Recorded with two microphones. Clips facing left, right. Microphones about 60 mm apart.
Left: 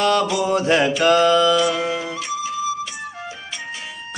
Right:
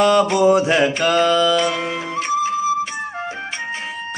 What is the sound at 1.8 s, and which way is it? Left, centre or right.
Music, right.